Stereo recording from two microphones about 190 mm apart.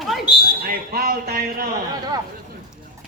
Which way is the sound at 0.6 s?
50° right (ahead or behind).